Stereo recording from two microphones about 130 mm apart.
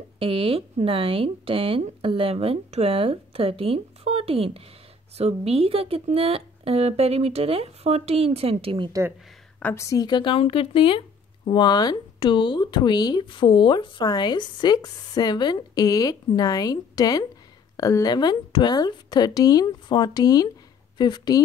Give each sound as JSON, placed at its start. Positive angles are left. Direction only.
{"t": 0.2, "sound": "speech", "side_deg": -45}
{"t": 9.6, "sound": "a woman's voice", "side_deg": 15}
{"t": 9.8, "sound": "a woman's voice", "side_deg": 30}